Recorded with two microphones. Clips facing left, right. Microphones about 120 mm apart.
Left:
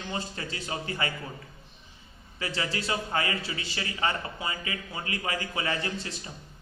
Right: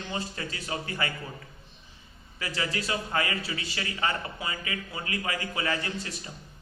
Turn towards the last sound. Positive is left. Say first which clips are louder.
# left 1 dB
turn(degrees=25)  # may be behind; listen again after turning